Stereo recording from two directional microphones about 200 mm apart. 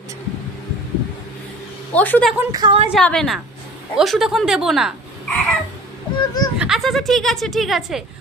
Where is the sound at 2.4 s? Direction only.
20° right (ahead or behind).